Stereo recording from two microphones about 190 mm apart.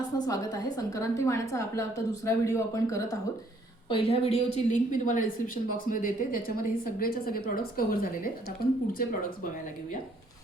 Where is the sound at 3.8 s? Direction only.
30° left (ahead or behind).